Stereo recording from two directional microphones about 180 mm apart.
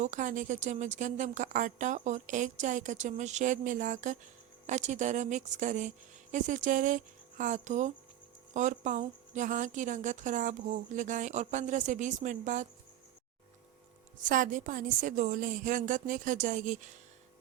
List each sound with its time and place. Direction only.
0.0 s a woman's voice: 45° right (ahead or behind)
14.2 s a woman's voice: 45° right (ahead or behind)